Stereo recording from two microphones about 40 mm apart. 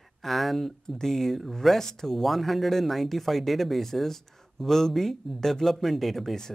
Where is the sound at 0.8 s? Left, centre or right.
Centre.